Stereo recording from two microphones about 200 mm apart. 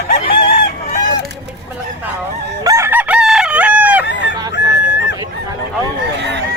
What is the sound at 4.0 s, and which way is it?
Chicken, 60° left (ahead or behind).